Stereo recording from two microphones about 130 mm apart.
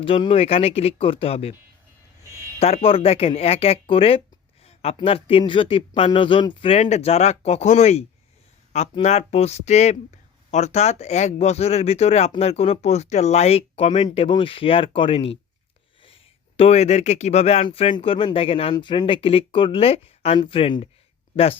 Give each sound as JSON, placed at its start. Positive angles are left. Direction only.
{"t": 0.0, "sound": "speech", "side_deg": 45}
{"t": 2.6, "sound": "speech", "side_deg": 55}
{"t": 4.6, "sound": "a sound", "side_deg": 50}
{"t": 5.0, "sound": "speech", "side_deg": 45}
{"t": 17.7, "sound": "speech", "side_deg": 45}